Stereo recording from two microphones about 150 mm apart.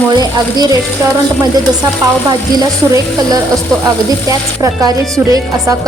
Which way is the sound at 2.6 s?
25° right (ahead or behind).